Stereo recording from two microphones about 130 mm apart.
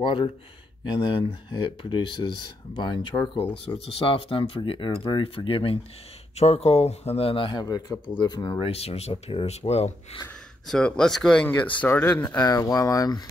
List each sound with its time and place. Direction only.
0.0 s speech: 35° left (ahead or behind)
8.2 s speech: 30° left (ahead or behind)
8.6 s speech: 50° left (ahead or behind)
10.7 s speech: 5° left (ahead or behind)
12.4 s speech: 30° left (ahead or behind)